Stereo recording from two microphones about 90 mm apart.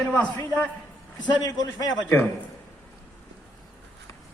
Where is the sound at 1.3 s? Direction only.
50° left (ahead or behind).